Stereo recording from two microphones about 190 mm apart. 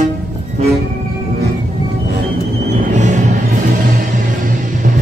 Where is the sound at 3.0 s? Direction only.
40° right (ahead or behind).